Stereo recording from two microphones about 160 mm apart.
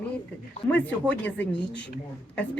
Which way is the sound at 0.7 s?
10° left (ahead or behind).